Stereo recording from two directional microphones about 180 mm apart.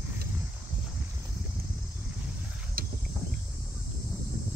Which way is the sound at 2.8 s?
55° right (ahead or behind).